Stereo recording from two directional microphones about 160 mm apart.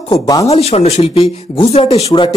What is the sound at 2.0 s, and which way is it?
Speech, 25° left (ahead or behind).